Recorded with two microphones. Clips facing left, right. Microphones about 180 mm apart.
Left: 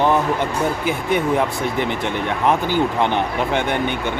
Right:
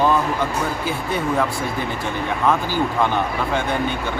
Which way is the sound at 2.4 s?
20° left (ahead or behind).